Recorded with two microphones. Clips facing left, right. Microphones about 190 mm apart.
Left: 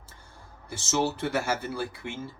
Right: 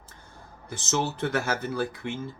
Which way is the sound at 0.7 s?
10° left (ahead or behind).